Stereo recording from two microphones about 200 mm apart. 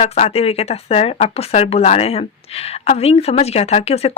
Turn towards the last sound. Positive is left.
turn(degrees=30)  # may be behind; listen again after turning